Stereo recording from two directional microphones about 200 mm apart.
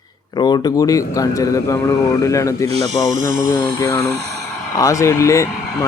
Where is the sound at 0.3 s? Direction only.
20° left (ahead or behind).